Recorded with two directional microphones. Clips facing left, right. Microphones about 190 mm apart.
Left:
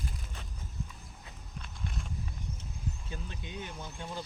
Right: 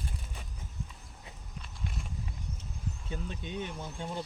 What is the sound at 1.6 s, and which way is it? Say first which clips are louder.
Clip-clop: even; 5° right (ahead or behind).